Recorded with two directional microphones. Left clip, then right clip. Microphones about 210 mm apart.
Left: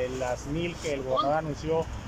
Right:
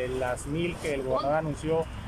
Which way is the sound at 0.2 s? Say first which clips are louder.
Right 1 dB; centre (ahead or behind).